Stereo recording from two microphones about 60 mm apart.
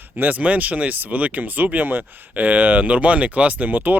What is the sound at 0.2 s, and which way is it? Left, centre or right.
Speech, right.